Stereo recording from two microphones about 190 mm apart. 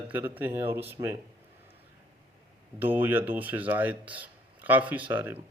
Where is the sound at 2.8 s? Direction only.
10° right (ahead or behind).